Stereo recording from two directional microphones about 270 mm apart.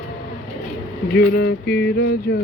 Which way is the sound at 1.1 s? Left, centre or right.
Left.